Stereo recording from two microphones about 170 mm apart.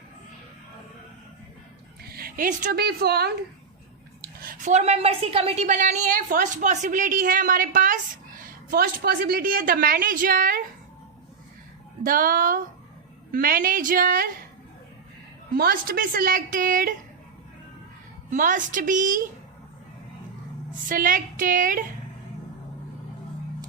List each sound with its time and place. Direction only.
2.1 s a woman's voice: 60° right (ahead or behind)
4.2 s a sound: 60° right (ahead or behind)
4.7 s a woman's voice: 35° right (ahead or behind); by 10.6 s 55° right (ahead or behind)
12.0 s a woman's voice: 55° right (ahead or behind)
15.5 s a woman's voice: 60° right (ahead or behind)
18.3 s a woman's voice: 50° right (ahead or behind)
20.8 s a woman's voice: 50° right (ahead or behind)